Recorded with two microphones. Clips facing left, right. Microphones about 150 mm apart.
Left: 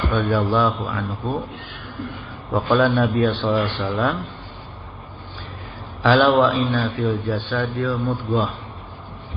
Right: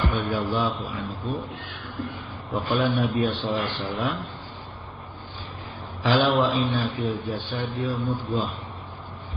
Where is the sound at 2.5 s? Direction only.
80° left.